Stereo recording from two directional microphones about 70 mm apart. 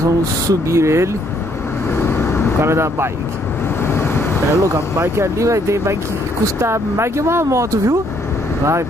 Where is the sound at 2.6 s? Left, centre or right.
Right.